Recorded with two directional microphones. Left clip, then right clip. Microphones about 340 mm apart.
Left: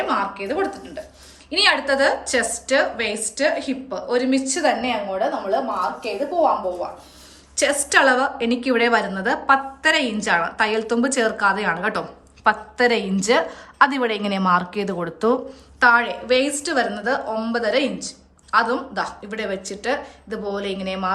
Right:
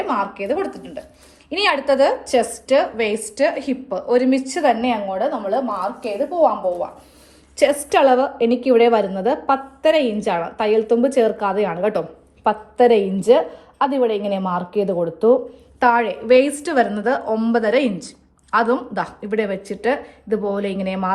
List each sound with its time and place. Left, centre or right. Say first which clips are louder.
0.1 s a woman's voice: right 2 dB; centre
7.5 s a woman's voice: right 2 dB; centre
15.8 s a woman's voice: even; centre